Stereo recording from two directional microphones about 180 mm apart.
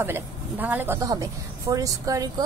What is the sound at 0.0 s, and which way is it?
A woman's voice, 10° right (ahead or behind).